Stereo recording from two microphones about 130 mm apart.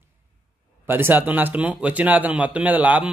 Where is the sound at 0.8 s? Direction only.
15° right (ahead or behind).